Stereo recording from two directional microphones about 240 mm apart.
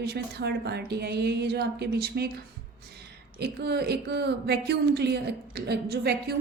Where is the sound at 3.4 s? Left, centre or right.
Right.